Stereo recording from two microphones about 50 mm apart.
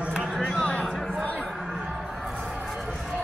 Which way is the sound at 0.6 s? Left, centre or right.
Left.